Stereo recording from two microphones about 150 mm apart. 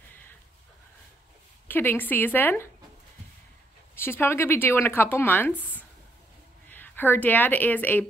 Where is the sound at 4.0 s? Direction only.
15° left (ahead or behind).